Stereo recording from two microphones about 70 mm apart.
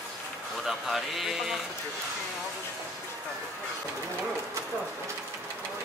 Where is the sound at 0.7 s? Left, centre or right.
Centre.